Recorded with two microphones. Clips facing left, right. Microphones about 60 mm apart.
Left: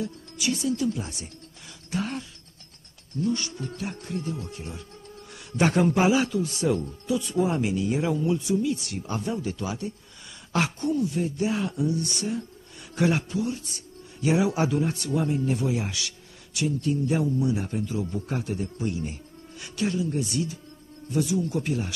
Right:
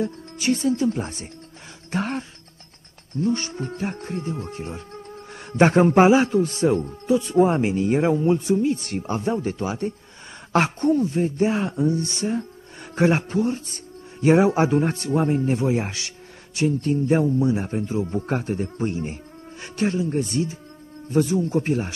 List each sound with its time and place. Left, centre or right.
0.0 s speech: right